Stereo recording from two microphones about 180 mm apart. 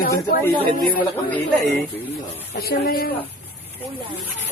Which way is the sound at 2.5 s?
55° left (ahead or behind).